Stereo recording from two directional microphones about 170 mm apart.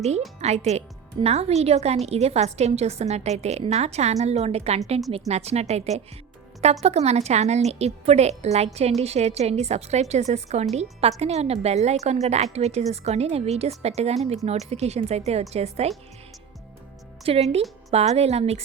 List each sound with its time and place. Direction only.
0.3 s a woman's voice: 40° right (ahead or behind)
17.2 s a woman's voice: 35° right (ahead or behind)